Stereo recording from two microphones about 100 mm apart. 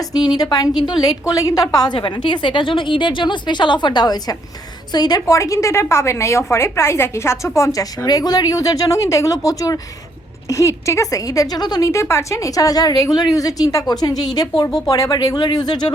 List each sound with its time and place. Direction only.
0.1 s a woman's voice: 40° left (ahead or behind)
1.3 s a woman's voice: 35° left (ahead or behind)
11.9 s a woman's voice: 30° left (ahead or behind); by 15.9 s 45° left (ahead or behind)